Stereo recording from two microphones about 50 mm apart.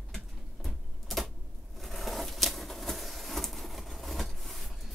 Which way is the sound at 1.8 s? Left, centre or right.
Centre.